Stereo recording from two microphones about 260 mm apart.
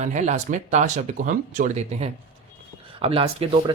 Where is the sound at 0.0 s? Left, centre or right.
Right.